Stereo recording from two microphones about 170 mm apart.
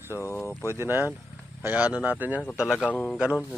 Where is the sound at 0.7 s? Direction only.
15° right (ahead or behind).